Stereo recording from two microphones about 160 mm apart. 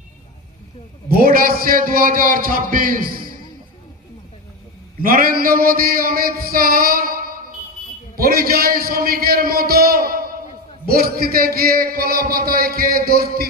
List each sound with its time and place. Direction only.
1.0 s a man's voice: 65° right (ahead or behind)
5.0 s a man's voice: 65° right (ahead or behind)